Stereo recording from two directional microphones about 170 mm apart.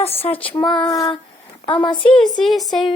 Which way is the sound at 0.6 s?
25° left (ahead or behind).